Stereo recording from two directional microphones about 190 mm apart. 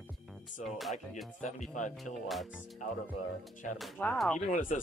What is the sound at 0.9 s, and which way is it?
Speech, 40° left (ahead or behind).